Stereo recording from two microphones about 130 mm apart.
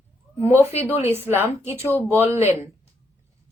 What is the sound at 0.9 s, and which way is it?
A woman's voice, 15° right (ahead or behind).